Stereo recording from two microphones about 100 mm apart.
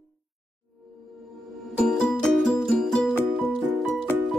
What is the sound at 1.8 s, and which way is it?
Music, 5° left (ahead or behind).